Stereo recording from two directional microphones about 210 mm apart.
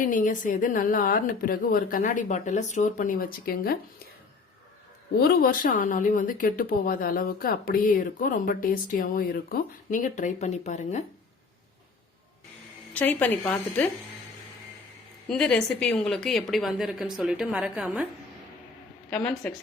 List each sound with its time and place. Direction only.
0.0 s a woman's voice: 40° left (ahead or behind)
5.3 s a woman's voice: 45° left (ahead or behind)
12.9 s a woman's voice: 10° left (ahead or behind)
15.3 s speech: 5° left (ahead or behind)
19.1 s speech: 5° left (ahead or behind)